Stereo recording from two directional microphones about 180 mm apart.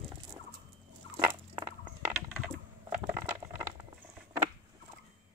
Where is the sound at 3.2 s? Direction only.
10° right (ahead or behind).